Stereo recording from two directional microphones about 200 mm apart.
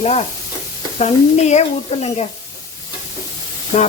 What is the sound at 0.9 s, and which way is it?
Stir, 35° left (ahead or behind).